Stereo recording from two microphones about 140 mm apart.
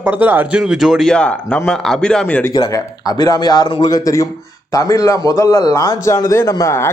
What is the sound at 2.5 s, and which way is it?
A man's voice, 30° left (ahead or behind).